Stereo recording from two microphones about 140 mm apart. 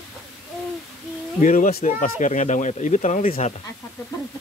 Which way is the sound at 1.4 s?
75° left (ahead or behind).